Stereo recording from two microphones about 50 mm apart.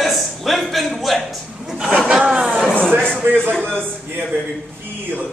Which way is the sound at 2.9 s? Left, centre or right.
Centre.